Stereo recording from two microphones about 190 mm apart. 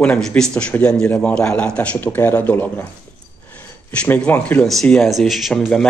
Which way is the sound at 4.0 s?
5° left (ahead or behind).